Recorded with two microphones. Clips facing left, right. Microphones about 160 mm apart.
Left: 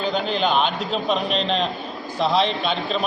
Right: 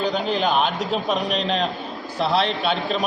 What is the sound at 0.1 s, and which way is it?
A man's voice, 5° right (ahead or behind).